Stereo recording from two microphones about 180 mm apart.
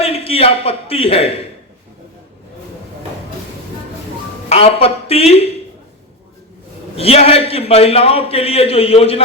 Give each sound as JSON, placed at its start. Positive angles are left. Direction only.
{"t": 0.0, "sound": "speech", "side_deg": 35}
{"t": 4.4, "sound": "a man's voice", "side_deg": 35}
{"t": 6.9, "sound": "a man's voice", "side_deg": 35}